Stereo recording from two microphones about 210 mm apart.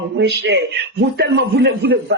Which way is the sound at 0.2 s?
55° right (ahead or behind).